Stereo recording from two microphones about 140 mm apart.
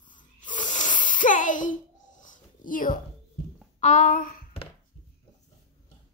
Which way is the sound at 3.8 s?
65° left (ahead or behind).